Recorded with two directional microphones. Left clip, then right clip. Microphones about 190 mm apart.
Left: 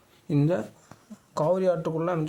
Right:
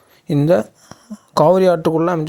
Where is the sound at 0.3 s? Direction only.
40° right (ahead or behind).